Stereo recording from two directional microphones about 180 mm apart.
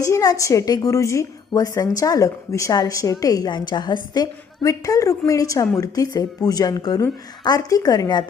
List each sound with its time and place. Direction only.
0.0 s speech: 20° left (ahead or behind)